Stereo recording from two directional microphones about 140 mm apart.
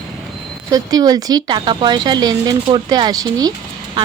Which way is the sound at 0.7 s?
25° right (ahead or behind).